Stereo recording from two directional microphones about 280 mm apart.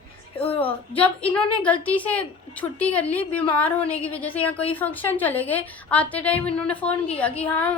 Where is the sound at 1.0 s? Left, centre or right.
Centre.